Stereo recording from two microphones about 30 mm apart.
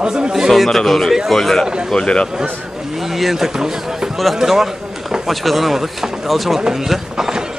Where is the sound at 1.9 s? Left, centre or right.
Left.